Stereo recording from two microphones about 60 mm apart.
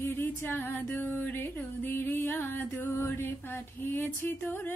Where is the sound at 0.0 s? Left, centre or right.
Left.